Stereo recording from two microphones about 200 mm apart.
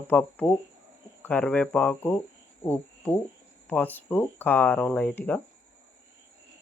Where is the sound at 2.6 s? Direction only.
10° left (ahead or behind).